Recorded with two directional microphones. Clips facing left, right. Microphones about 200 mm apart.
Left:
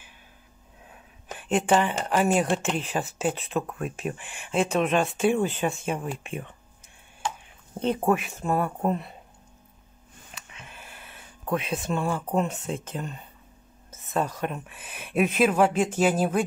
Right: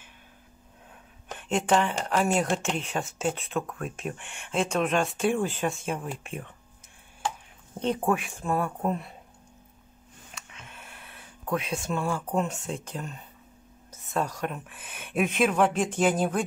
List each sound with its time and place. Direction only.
1.5 s speech: 5° left (ahead or behind)
8.1 s speech: centre (ahead or behind)
10.7 s a sound: 5° left (ahead or behind)
12.4 s speech: centre (ahead or behind)
14.8 s speech: 30° left (ahead or behind)
15.0 s speech: 5° left (ahead or behind)